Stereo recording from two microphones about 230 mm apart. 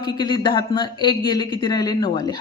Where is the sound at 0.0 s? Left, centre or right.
Centre.